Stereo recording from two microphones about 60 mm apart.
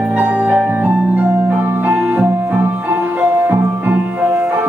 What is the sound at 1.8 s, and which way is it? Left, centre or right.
Music, right.